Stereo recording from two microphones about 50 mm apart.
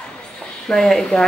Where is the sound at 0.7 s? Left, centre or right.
Centre.